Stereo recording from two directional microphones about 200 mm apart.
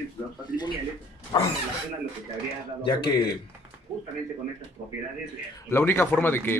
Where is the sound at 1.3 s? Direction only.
20° left (ahead or behind).